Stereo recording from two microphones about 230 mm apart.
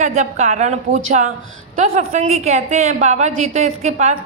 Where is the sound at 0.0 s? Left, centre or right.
Right.